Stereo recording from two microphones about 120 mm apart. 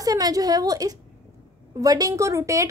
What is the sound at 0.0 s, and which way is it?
A woman's voice, 30° right (ahead or behind).